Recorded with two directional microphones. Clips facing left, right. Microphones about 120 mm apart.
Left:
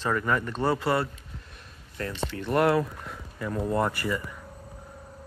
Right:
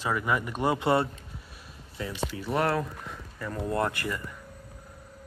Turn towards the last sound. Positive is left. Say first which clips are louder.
# left 2 dB
turn(degrees=5)  # may be behind; listen again after turning